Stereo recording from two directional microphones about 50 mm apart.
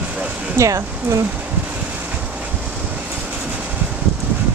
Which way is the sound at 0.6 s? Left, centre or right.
Right.